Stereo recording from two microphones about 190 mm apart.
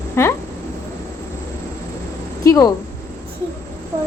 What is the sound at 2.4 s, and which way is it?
Speech, 20° left (ahead or behind).